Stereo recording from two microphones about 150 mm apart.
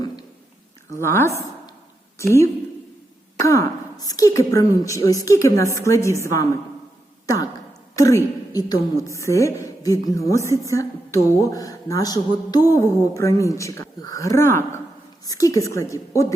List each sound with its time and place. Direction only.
0.9 s a woman's voice: 15° left (ahead or behind)
7.9 s a woman's voice: 20° left (ahead or behind)